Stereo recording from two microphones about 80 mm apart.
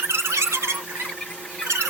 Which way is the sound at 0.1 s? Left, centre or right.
Right.